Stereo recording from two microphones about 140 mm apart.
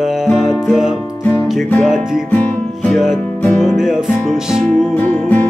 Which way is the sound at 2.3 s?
10° left (ahead or behind).